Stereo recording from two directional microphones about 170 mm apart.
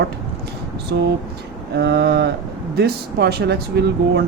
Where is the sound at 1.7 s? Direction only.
80° right.